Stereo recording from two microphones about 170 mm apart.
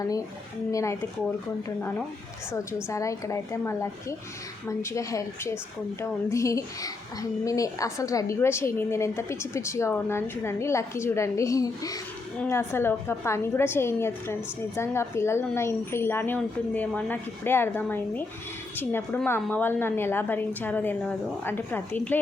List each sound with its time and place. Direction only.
0.7 s a woman's voice: 20° left (ahead or behind)
2.5 s a woman's voice: 15° left (ahead or behind)